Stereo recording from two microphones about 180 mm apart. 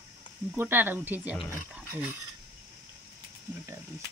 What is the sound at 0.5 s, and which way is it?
Speech, 10° right (ahead or behind).